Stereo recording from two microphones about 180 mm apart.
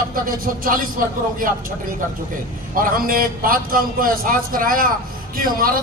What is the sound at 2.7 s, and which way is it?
A man's voice, 50° right (ahead or behind).